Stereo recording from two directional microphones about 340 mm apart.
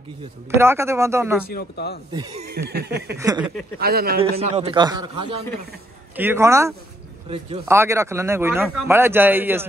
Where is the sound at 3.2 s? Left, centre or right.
Centre.